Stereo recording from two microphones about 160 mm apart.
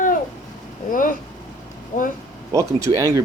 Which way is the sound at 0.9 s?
60° left (ahead or behind).